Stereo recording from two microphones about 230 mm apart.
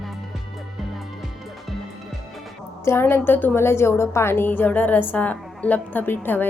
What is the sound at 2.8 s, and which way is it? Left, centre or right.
A woman's voice, centre.